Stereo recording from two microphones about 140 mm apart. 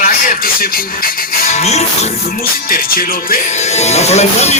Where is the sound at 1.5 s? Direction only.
50° left (ahead or behind).